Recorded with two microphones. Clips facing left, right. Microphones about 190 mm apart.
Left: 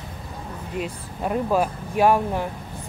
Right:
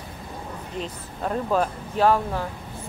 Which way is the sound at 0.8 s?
10° left (ahead or behind).